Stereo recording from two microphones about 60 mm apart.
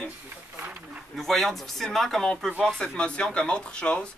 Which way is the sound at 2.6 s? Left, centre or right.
Centre.